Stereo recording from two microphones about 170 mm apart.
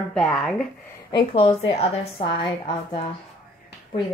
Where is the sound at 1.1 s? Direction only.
30° left (ahead or behind).